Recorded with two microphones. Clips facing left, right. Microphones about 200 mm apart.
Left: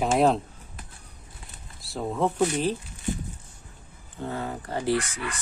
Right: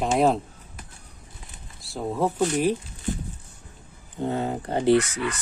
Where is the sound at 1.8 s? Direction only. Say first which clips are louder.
Right 1 dB; centre (ahead or behind).